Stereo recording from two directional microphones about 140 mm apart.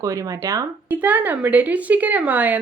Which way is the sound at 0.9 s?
10° right (ahead or behind).